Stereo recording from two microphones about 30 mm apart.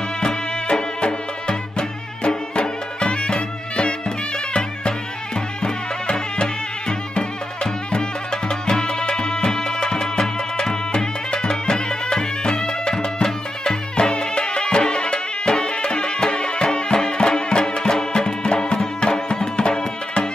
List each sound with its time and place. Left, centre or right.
0.2 s music: left